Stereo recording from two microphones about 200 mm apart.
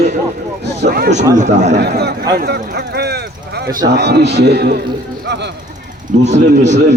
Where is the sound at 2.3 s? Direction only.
55° right (ahead or behind).